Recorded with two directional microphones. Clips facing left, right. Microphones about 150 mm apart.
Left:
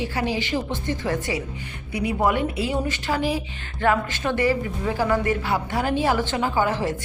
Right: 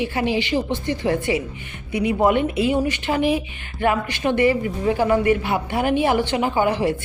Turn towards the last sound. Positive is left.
turn(degrees=-15)  # may be behind; listen again after turning